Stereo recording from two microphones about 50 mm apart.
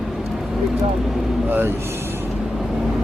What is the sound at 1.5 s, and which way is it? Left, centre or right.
Speech, right.